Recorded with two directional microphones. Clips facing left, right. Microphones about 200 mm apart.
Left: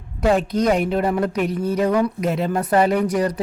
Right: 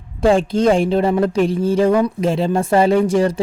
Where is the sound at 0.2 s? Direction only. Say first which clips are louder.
Right 4 dB; 30° right (ahead or behind).